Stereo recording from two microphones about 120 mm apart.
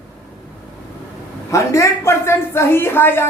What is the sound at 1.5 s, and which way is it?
A woman's voice, 25° left (ahead or behind).